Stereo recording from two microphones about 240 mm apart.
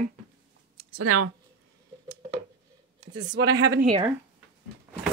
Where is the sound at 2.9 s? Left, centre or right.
Centre.